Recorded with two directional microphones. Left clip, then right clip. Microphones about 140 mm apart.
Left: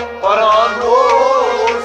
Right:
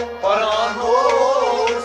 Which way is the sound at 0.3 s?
35° left (ahead or behind).